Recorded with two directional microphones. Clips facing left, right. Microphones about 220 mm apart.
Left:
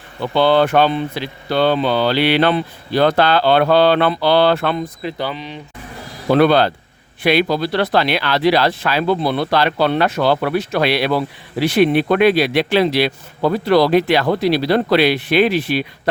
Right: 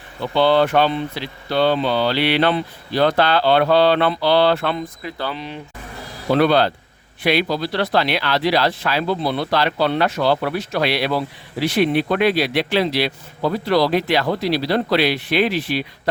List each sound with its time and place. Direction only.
0.3 s speech: 50° left (ahead or behind)
5.0 s speech: 20° left (ahead or behind)
5.3 s speech: centre (ahead or behind)
6.3 s speech: 55° left (ahead or behind)